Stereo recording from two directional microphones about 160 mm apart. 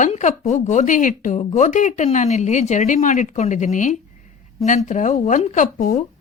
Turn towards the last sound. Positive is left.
turn(degrees=50)  # may be behind; listen again after turning